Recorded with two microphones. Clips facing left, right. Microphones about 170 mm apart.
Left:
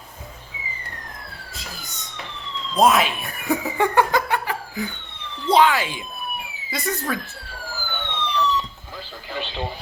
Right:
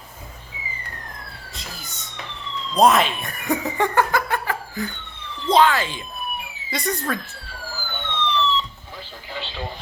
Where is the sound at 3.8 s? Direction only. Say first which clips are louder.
Left 2 dB; 15° left (ahead or behind).